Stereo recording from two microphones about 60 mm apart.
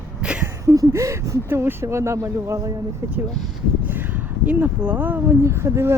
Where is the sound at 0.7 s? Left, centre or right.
Right.